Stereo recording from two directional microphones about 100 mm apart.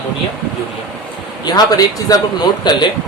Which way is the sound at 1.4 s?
40° left (ahead or behind).